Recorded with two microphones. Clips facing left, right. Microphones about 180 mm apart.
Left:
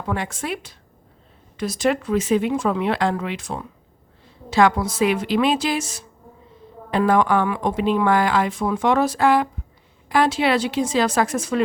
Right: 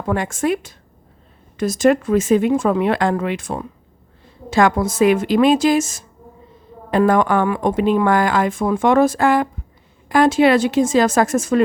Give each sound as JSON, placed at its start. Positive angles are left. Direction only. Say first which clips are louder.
{"t": 0.1, "sound": "a woman's voice", "louder": "right 7 dB", "side_deg": -45}